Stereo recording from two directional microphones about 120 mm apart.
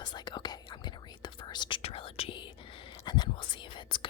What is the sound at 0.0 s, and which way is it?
Whispering, 35° left (ahead or behind).